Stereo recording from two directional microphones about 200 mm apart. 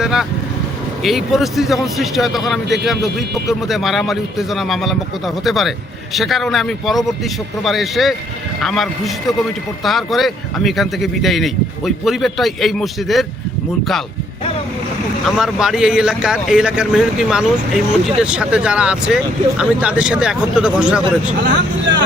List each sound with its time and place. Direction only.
0.0 s vehicle: centre (ahead or behind)
1.0 s speech: centre (ahead or behind)
15.2 s speech: centre (ahead or behind)
21.4 s speech: 60° right (ahead or behind)